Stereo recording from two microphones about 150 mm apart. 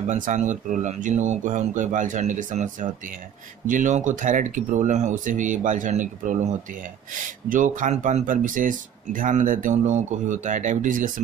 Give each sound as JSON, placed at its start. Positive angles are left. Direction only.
{"t": 0.1, "sound": "speech", "side_deg": -55}